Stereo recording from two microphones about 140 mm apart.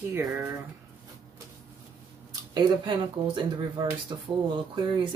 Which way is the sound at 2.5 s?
35° right (ahead or behind).